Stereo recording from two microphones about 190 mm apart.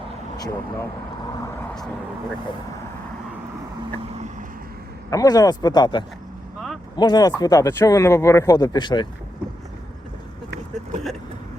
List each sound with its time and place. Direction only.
0.3 s speech: 20° left (ahead or behind)
5.1 s speech: 20° left (ahead or behind)